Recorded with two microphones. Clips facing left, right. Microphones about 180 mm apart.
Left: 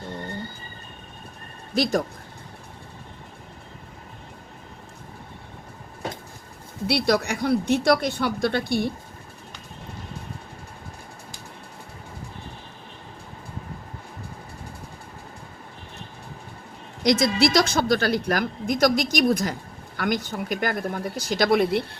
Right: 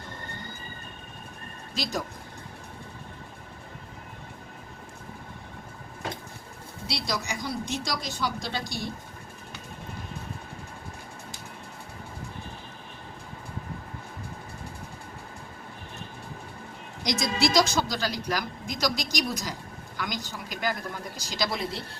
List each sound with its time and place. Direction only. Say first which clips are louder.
1.8 s speech: left 9 dB; 50° left (ahead or behind)
6.8 s speech: left 10 dB; 60° left (ahead or behind)
17.0 s speech: left 7 dB; 60° left (ahead or behind)